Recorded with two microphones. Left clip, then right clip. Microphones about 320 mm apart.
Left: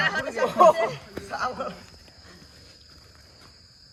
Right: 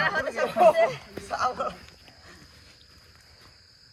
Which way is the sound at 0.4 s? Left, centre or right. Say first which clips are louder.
Left 3 dB; left.